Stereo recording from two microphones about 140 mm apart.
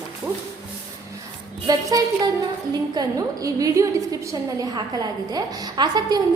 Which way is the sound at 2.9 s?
25° right (ahead or behind).